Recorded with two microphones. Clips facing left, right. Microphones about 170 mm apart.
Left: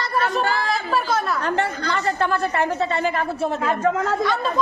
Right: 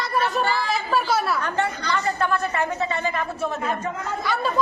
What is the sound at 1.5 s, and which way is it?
Speech, 75° left (ahead or behind).